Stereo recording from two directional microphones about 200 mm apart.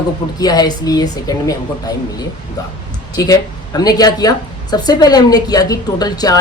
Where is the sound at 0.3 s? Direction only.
20° left (ahead or behind).